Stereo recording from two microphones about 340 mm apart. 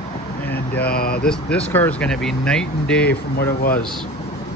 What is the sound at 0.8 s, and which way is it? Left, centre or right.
Speech, left.